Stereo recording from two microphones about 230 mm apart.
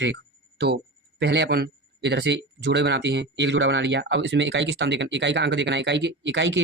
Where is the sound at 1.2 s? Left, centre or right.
Right.